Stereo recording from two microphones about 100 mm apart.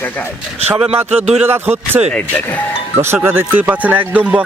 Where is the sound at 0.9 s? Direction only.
90° right.